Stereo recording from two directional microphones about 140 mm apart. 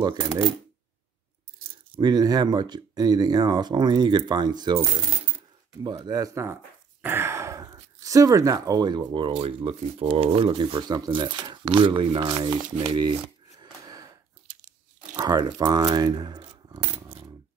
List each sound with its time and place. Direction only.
0.0 s speech: 35° right (ahead or behind)
2.0 s speech: 30° right (ahead or behind)
12.7 s shuffling cards: 35° right (ahead or behind)
15.1 s speech: 30° right (ahead or behind)